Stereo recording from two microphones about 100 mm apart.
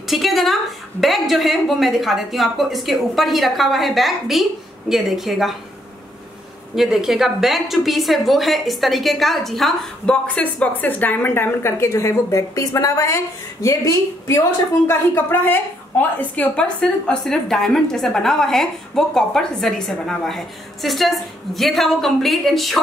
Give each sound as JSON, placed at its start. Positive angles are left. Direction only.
{"t": 0.0, "sound": "a woman's voice", "side_deg": 0}
{"t": 6.7, "sound": "a woman's voice", "side_deg": -5}